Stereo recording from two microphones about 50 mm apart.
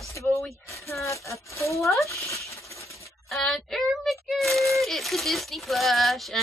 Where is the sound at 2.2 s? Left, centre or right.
Left.